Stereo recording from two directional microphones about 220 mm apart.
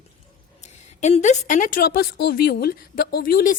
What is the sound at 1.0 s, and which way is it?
A woman's voice, 30° left (ahead or behind).